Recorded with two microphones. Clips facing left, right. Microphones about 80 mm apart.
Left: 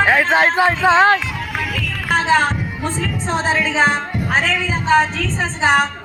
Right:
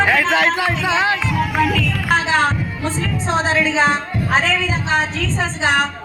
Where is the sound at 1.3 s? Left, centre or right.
Right.